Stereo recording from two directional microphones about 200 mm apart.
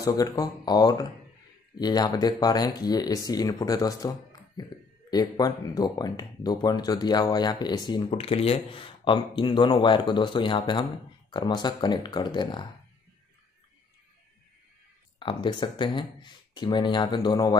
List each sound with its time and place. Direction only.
0.0 s speech: 20° left (ahead or behind)
15.1 s speech: 25° left (ahead or behind)